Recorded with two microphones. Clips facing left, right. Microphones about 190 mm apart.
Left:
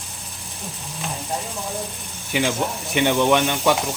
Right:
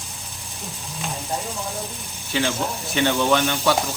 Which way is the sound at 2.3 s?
15° left (ahead or behind).